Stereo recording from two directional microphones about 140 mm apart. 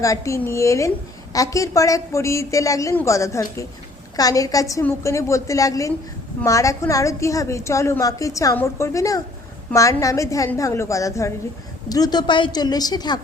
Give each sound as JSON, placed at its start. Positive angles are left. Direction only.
{"t": 0.0, "sound": "a woman's voice", "side_deg": 20}